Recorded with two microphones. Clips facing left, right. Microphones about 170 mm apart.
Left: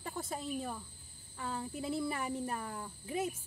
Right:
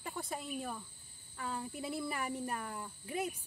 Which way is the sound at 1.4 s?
Centre (ahead or behind).